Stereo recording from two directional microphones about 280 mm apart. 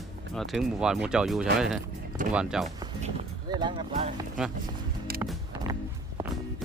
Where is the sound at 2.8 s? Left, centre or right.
Centre.